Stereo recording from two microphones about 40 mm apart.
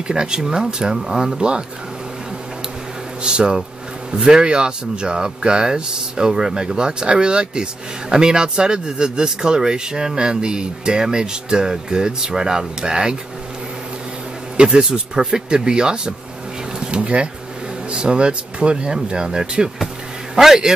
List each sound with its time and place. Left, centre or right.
0.1 s a man's voice: centre
3.3 s a man's voice: right
14.6 s speech: right
20.3 s a man's voice: centre